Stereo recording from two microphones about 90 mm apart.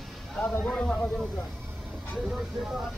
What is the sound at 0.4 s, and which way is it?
Speech, 10° left (ahead or behind).